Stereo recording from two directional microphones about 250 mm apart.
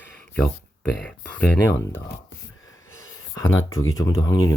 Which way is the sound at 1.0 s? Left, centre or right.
Centre.